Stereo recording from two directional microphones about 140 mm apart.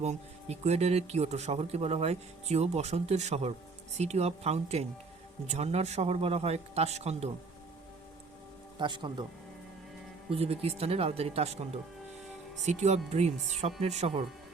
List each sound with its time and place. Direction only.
0.0 s speech: 50° right (ahead or behind)
8.8 s speech: 35° right (ahead or behind)
10.2 s speech: 45° right (ahead or behind)